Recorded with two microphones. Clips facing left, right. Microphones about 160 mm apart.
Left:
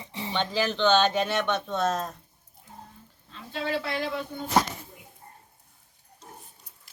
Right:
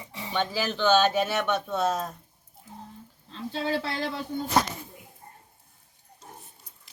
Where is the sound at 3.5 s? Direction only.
30° right (ahead or behind).